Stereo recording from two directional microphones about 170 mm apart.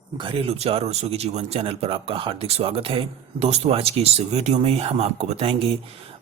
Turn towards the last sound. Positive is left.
turn(degrees=-35)  # may be behind; listen again after turning